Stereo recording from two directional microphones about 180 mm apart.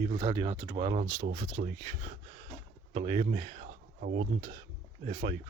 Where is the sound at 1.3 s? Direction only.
40° right (ahead or behind).